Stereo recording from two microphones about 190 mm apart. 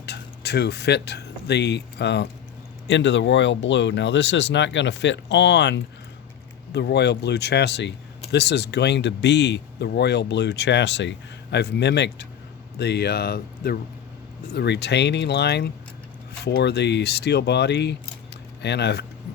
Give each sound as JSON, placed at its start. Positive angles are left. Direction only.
{"t": 0.0, "sound": "speech", "side_deg": 60}